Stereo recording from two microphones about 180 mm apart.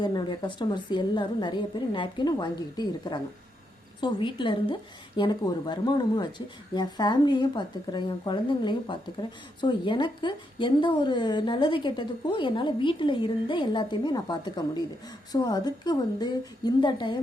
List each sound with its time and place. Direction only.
0.0 s a woman's voice: 25° left (ahead or behind)